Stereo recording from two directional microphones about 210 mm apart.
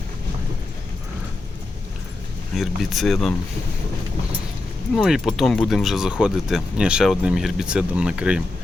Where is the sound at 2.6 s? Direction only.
Centre (ahead or behind).